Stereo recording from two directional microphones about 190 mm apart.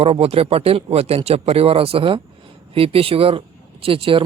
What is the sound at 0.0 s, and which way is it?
Speech, 30° right (ahead or behind).